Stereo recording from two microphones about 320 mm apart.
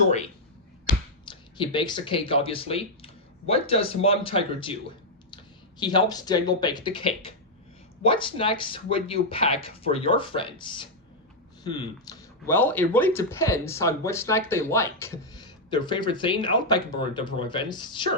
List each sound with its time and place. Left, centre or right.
1.2 s speech: centre
5.8 s speech: centre